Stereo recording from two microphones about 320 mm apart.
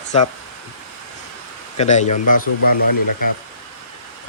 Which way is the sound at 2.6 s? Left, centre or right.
Left.